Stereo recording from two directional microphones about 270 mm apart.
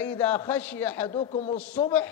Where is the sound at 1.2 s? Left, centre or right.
Left.